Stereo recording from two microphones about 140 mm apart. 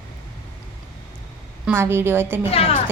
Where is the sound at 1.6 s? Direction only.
15° right (ahead or behind).